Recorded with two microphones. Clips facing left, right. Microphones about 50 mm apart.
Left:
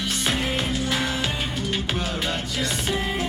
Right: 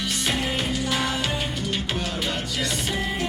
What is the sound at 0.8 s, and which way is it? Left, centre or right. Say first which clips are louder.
Music: even; left.